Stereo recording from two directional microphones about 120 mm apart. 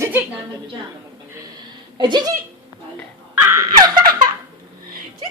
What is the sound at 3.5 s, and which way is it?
Laughter, 30° right (ahead or behind).